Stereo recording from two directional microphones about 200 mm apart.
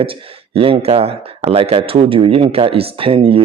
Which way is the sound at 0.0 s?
25° right (ahead or behind).